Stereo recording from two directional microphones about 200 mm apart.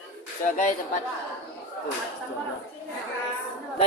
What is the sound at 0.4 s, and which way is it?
Speech, 40° left (ahead or behind).